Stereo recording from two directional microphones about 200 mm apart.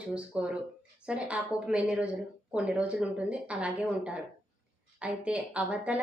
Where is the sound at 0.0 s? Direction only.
5° right (ahead or behind).